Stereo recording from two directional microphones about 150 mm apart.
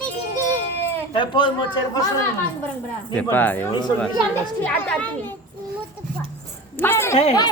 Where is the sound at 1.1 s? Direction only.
30° left (ahead or behind).